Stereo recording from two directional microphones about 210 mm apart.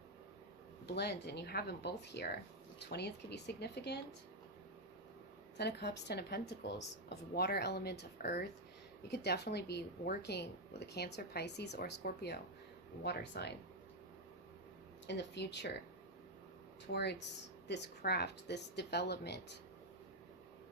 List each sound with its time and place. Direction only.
0.9 s speech: 50° left (ahead or behind)
5.5 s speech: 50° left (ahead or behind)
15.0 s speech: 55° left (ahead or behind)
16.8 s speech: 55° left (ahead or behind)